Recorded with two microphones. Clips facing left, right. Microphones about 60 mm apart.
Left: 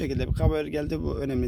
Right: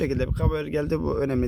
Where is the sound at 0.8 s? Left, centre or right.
Right.